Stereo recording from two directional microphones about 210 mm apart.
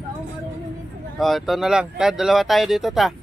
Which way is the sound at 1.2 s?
Centre (ahead or behind).